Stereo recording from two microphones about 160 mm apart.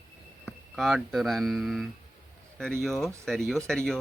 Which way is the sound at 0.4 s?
Centre (ahead or behind).